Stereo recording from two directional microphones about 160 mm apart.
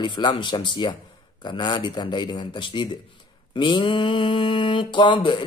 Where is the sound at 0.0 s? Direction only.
30° left (ahead or behind).